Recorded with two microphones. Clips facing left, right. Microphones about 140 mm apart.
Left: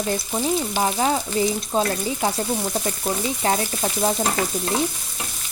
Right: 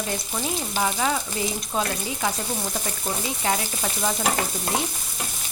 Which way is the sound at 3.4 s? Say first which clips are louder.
Left 3 dB; 35° left (ahead or behind).